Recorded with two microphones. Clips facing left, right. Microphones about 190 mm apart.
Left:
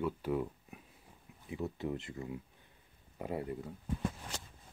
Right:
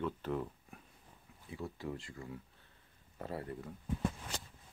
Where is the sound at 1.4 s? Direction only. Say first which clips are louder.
Left 4 dB; 20° left (ahead or behind).